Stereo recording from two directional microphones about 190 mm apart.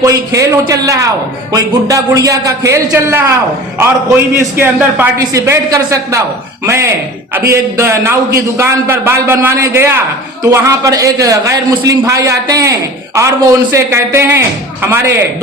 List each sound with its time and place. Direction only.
0.0 s a man's voice: 15° right (ahead or behind)
4.4 s a man's voice: 10° right (ahead or behind)